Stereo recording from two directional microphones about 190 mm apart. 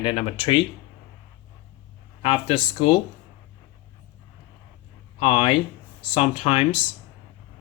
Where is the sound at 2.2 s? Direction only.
30° left (ahead or behind).